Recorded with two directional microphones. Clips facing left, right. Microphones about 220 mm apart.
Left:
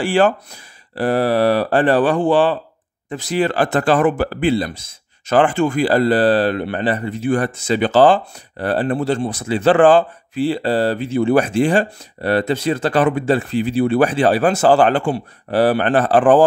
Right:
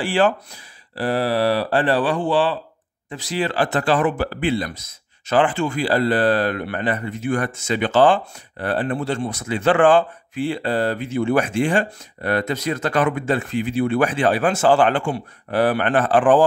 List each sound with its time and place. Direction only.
0.0 s speech: 45° left (ahead or behind); by 4.9 s 30° left (ahead or behind)
5.2 s speech: 45° left (ahead or behind)